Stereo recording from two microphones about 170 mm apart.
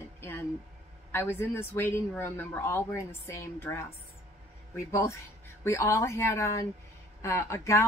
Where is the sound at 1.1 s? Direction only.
15° left (ahead or behind).